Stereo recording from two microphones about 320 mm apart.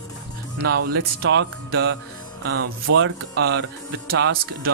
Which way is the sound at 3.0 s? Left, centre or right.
Right.